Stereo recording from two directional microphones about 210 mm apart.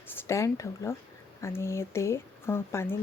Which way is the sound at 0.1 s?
15° left (ahead or behind).